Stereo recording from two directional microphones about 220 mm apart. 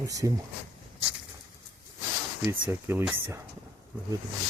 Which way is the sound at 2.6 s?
10° right (ahead or behind).